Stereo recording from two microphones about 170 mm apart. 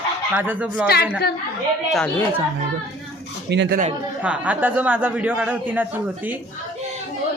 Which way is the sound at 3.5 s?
90° right.